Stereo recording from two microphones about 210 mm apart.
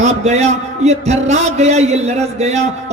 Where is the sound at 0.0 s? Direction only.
35° right (ahead or behind).